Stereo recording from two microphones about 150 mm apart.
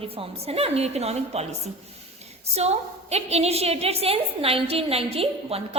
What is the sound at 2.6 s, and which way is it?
A woman's voice, 45° right (ahead or behind).